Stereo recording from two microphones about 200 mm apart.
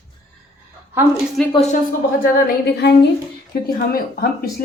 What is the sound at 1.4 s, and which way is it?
Speech, centre (ahead or behind).